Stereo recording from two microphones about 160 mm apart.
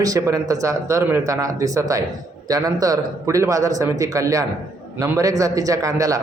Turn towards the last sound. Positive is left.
turn(degrees=-20)  # may be behind; listen again after turning